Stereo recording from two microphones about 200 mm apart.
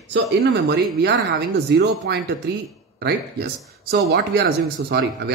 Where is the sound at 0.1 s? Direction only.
60° right (ahead or behind).